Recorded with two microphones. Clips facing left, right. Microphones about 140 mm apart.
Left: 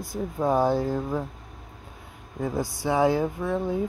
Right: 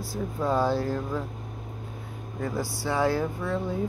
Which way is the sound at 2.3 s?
20° left (ahead or behind).